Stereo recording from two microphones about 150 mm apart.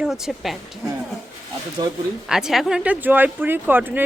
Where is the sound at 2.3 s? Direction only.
5° right (ahead or behind).